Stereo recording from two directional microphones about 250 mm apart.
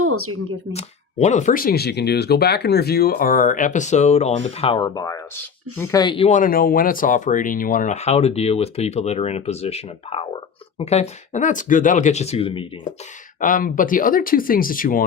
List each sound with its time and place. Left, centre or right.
0.0 s speech: right
0.7 s speech: left
13.4 s speech: left